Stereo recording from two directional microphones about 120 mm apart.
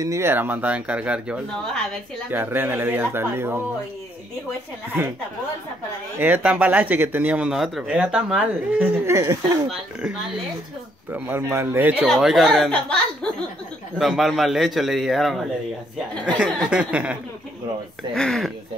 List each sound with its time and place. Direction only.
0.0 s speech: 25° right (ahead or behind)
6.1 s speech: 15° right (ahead or behind)
9.0 s speech: 25° right (ahead or behind)
11.1 s speech: 15° right (ahead or behind)
12.2 s a man's voice: centre (ahead or behind)
16.7 s speech: 10° right (ahead or behind)
18.1 s a man's voice: 5° left (ahead or behind)